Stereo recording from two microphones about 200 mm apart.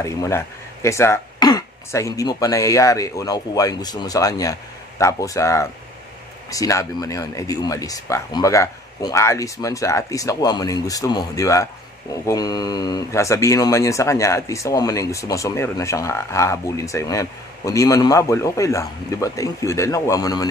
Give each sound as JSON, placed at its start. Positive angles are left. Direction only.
{"t": 0.0, "sound": "speech", "side_deg": 15}